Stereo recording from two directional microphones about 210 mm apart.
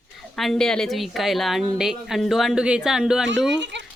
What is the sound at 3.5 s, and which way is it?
Children playing, 55° right (ahead or behind).